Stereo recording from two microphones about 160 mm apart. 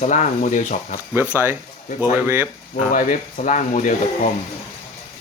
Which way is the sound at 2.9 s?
55° left (ahead or behind).